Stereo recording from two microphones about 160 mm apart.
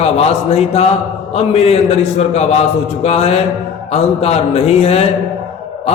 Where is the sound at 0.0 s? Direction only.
40° left (ahead or behind).